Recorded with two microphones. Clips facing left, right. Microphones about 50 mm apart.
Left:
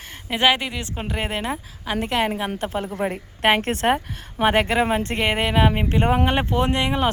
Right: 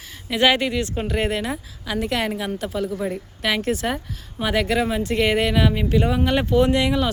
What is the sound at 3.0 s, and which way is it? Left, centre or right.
A woman's voice, left.